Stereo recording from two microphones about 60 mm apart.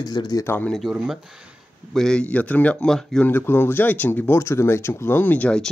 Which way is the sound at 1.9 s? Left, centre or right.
Centre.